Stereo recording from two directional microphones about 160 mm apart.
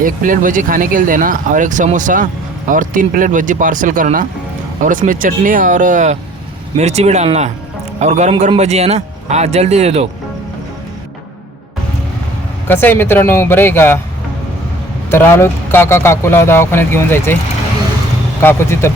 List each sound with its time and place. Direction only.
0.0 s speech: 60° right (ahead or behind); by 10.1 s 40° right (ahead or behind)
12.6 s speech: 15° left (ahead or behind)
15.1 s speech: 15° left (ahead or behind)
18.4 s speech: 15° left (ahead or behind)